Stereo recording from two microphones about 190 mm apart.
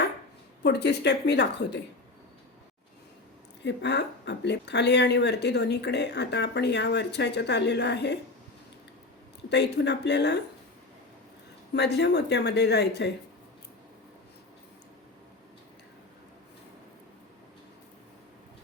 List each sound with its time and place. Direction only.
0.6 s speech: 60° left (ahead or behind)
3.6 s speech: 65° left (ahead or behind)
9.5 s speech: 65° left (ahead or behind)
11.7 s speech: 65° left (ahead or behind)